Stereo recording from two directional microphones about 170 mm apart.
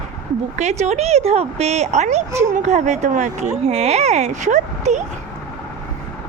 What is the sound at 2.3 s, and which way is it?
Speech, 15° right (ahead or behind).